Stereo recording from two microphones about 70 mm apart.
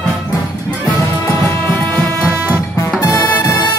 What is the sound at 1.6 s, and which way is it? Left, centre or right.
Music, left.